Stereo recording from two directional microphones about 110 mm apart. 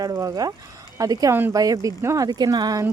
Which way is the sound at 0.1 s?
30° right (ahead or behind).